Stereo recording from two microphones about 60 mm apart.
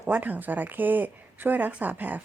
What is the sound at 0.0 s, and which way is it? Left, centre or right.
A woman's voice, right.